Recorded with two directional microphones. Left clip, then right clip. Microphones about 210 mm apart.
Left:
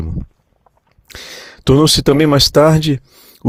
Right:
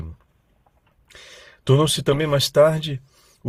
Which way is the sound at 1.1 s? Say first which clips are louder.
Left 12 dB; 50° left (ahead or behind).